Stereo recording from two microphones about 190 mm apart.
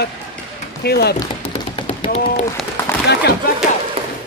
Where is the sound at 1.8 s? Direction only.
30° left (ahead or behind).